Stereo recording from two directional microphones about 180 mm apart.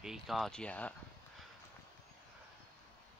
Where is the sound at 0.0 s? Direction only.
Centre (ahead or behind).